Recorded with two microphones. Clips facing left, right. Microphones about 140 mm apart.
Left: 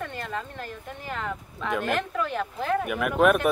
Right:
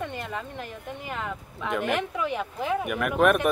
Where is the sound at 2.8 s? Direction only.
Centre (ahead or behind).